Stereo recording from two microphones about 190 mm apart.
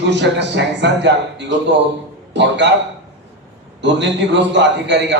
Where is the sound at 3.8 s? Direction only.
70° right (ahead or behind).